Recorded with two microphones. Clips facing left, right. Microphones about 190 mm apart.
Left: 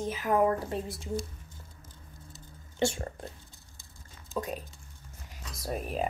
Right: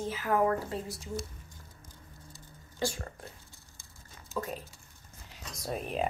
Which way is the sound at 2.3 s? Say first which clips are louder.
Left 6 dB; 25° left (ahead or behind).